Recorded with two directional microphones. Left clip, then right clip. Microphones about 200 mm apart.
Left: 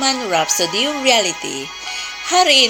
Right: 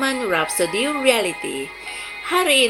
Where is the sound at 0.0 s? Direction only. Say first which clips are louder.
Left 3 dB; 35° left (ahead or behind).